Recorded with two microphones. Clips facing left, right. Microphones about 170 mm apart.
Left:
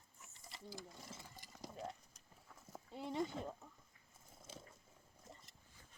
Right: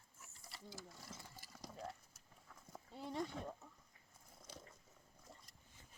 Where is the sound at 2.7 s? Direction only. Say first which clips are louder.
Left 2 dB; centre (ahead or behind).